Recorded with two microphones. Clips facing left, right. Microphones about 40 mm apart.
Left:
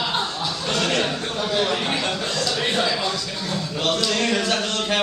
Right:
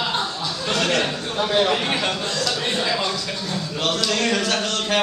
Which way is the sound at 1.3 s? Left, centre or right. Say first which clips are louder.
Right 5 dB; centre.